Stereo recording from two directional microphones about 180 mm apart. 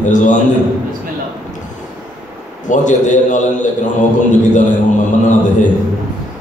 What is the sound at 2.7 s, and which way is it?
Speech, 45° left (ahead or behind).